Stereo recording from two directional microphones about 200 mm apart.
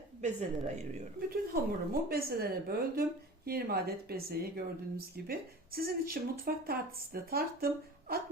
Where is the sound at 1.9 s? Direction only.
50° right (ahead or behind).